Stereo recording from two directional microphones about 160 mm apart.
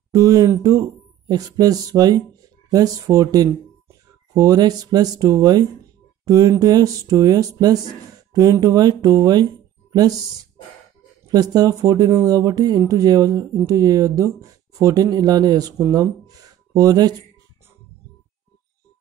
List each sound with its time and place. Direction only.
0.1 s speech: 20° right (ahead or behind)
11.2 s speech: 25° right (ahead or behind)